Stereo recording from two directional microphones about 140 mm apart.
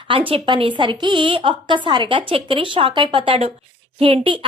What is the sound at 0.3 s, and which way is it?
A woman's voice, 35° right (ahead or behind).